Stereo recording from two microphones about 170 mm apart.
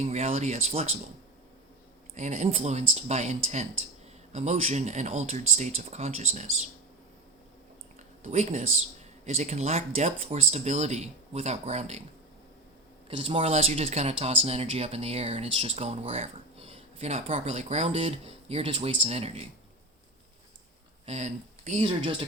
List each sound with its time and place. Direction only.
0.0 s speech: 40° right (ahead or behind)
2.1 s speech: 45° right (ahead or behind)
8.2 s speech: 40° right (ahead or behind)
13.1 s speech: 30° right (ahead or behind)
21.1 s speech: 45° right (ahead or behind)
21.8 s speech: 30° right (ahead or behind)